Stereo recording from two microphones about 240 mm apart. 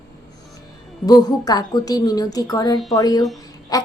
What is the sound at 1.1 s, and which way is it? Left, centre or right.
A woman's voice, centre.